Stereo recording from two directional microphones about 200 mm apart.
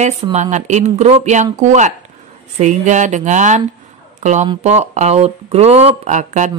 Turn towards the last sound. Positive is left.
turn(degrees=-40)  # may be behind; listen again after turning